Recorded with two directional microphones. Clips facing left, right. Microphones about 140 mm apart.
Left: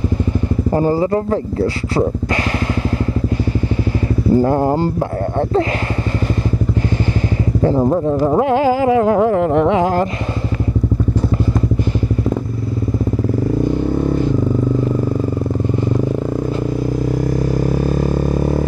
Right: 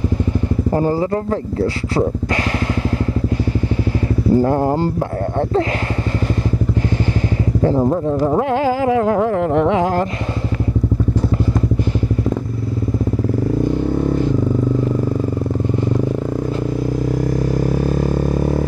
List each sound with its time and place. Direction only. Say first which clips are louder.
0.7 s speech: left 3 dB; 15° left (ahead or behind)
4.4 s speech: left 2 dB; 15° left (ahead or behind)
7.6 s speech: left 2 dB; 20° left (ahead or behind)
17.8 s vehicle: left 1 dB; 15° left (ahead or behind)